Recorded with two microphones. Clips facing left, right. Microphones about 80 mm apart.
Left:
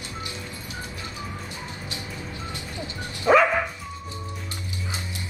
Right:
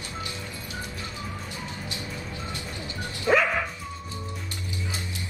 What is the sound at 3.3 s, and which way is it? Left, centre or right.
Bow-wow, left.